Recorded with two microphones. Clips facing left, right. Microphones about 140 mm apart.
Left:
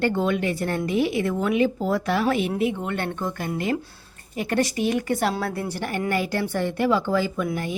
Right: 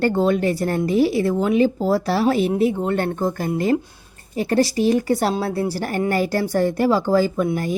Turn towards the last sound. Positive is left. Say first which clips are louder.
# right 5 dB
turn(degrees=-40)  # may be behind; listen again after turning